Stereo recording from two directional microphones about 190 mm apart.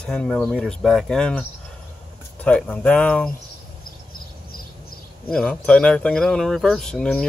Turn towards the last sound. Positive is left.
turn(degrees=5)  # may be behind; listen again after turning